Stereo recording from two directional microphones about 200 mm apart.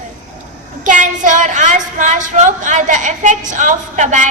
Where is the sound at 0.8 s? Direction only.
40° right (ahead or behind).